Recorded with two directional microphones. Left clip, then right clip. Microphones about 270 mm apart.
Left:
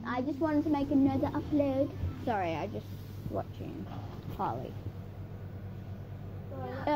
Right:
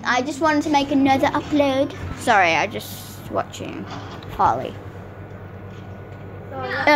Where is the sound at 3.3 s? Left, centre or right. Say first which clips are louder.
Right 13 dB; right.